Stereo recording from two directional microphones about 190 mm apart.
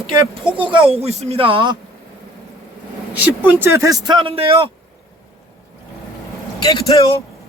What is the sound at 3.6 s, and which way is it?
Speech, 15° right (ahead or behind).